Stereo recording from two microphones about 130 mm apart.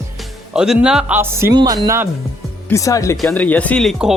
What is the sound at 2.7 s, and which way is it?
Speech, 25° left (ahead or behind).